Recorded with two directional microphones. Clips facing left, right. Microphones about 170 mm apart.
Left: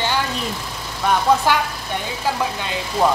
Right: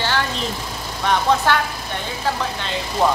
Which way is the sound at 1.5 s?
10° left (ahead or behind).